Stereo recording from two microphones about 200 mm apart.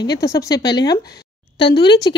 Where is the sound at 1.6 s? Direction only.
55° left (ahead or behind).